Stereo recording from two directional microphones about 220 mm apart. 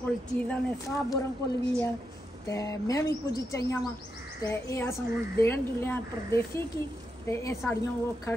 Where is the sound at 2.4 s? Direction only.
15° left (ahead or behind).